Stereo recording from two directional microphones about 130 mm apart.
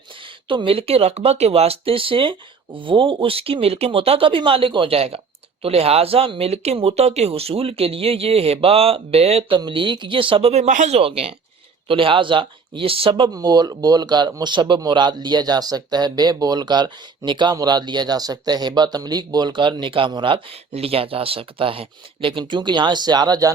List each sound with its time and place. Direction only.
0.4 s speech: 40° right (ahead or behind)
9.6 s speech: 40° right (ahead or behind)